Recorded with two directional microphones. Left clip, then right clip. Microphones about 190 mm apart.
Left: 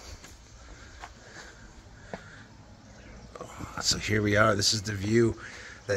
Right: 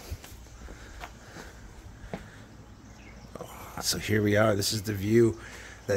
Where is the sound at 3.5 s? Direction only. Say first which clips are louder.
Left 3 dB; 25° right (ahead or behind).